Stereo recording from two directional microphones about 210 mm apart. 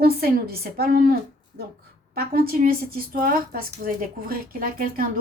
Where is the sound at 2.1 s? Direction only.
45° right (ahead or behind).